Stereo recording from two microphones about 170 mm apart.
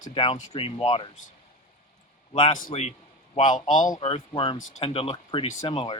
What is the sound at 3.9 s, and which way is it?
Speech, 30° left (ahead or behind).